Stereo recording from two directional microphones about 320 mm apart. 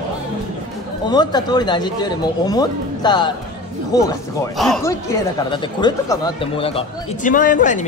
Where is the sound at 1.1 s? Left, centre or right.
Centre.